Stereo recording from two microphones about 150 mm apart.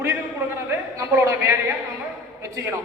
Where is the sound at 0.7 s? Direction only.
20° right (ahead or behind).